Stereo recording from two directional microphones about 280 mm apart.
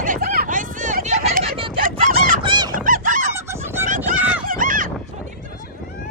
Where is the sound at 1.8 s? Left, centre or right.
Right.